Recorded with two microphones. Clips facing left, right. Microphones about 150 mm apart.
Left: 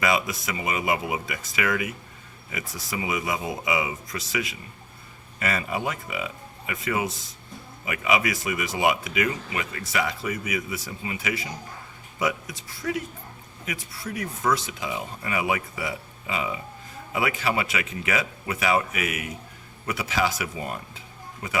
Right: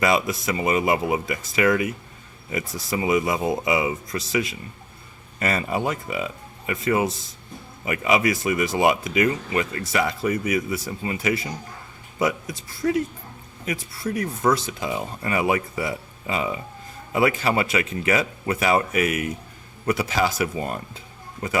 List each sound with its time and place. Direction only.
0.0 s speech: 35° right (ahead or behind)
12.8 s speech: 35° right (ahead or behind)